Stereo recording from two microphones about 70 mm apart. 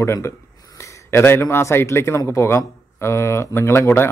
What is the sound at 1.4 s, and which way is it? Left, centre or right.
A man's voice, left.